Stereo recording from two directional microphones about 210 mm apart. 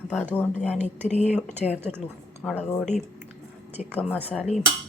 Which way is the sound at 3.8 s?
Centre (ahead or behind).